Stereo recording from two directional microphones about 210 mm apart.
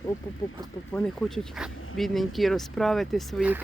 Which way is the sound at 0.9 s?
5° left (ahead or behind).